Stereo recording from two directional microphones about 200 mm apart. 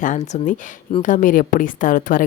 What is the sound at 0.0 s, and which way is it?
A woman's voice, 40° left (ahead or behind).